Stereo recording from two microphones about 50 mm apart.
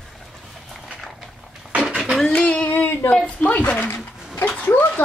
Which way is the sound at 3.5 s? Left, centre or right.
Left.